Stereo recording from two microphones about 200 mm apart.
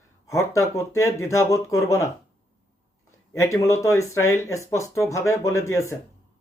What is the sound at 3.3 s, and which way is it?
Speech, 15° left (ahead or behind).